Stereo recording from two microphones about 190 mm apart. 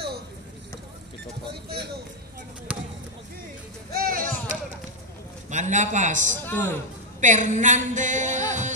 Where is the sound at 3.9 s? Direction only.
50° right (ahead or behind).